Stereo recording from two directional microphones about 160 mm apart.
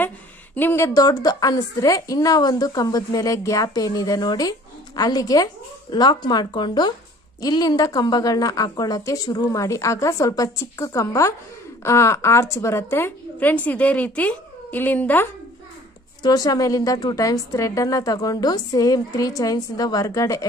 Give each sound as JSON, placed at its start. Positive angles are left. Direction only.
{"t": 0.6, "sound": "a woman's voice", "side_deg": 15}
{"t": 16.2, "sound": "a woman's voice", "side_deg": 25}